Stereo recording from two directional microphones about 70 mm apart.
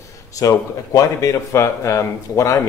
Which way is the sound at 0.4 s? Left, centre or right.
Left.